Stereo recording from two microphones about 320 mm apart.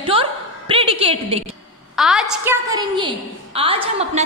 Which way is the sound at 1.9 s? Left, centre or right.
Centre.